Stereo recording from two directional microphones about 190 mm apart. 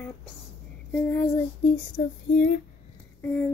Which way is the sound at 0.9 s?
15° left (ahead or behind).